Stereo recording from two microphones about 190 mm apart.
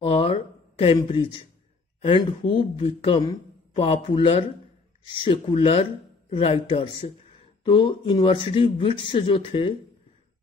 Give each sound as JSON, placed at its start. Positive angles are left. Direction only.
{"t": 0.0, "sound": "speech", "side_deg": 30}